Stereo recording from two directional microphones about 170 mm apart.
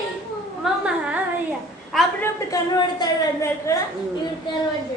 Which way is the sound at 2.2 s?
20° left (ahead or behind).